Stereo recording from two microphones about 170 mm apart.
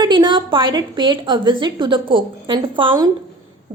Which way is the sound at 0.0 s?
25° right (ahead or behind).